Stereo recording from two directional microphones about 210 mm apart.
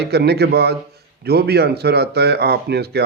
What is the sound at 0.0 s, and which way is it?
Speech, 50° right (ahead or behind).